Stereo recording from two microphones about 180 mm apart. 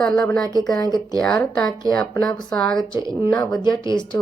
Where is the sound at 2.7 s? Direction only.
25° left (ahead or behind).